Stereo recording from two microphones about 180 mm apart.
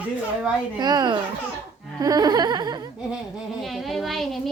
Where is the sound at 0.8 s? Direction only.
25° right (ahead or behind).